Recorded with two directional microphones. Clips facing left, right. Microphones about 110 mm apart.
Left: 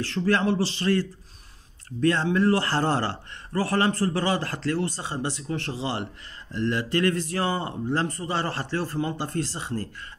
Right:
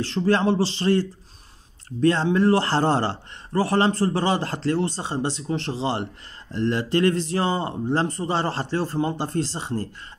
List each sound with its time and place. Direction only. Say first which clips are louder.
0.0 s a man's voice: right 3 dB; 25° right (ahead or behind)